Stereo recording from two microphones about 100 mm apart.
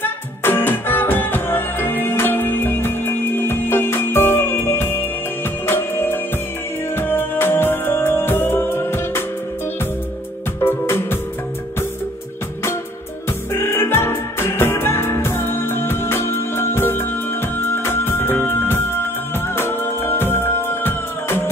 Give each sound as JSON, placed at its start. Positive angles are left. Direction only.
{"t": 0.0, "sound": "music", "side_deg": 20}
{"t": 10.6, "sound": "music", "side_deg": 25}
{"t": 13.5, "sound": "music", "side_deg": 25}